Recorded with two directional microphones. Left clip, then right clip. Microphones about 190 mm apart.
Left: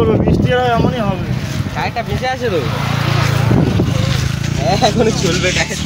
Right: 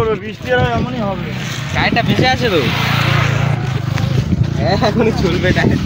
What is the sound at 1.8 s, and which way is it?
Vehicle, 40° right (ahead or behind).